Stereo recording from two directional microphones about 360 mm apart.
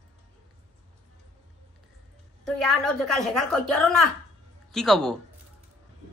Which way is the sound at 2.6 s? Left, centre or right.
Centre.